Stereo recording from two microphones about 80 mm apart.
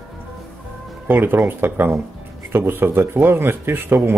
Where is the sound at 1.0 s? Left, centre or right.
Right.